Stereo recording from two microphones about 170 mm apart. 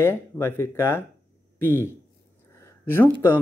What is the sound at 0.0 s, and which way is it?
A man's voice, 15° left (ahead or behind).